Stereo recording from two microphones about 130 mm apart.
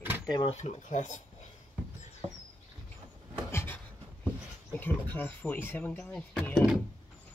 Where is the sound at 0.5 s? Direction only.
60° left (ahead or behind).